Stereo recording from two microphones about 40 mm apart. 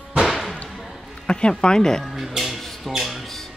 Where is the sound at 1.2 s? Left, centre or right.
Left.